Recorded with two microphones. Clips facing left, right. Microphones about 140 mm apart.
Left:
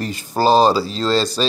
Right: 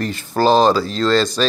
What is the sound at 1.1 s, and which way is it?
Speech, 35° left (ahead or behind).